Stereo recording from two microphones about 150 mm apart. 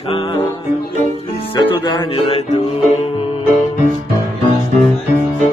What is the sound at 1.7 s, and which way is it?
Music, 30° left (ahead or behind).